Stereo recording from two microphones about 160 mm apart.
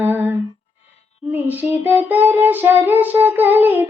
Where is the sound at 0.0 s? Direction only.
15° right (ahead or behind).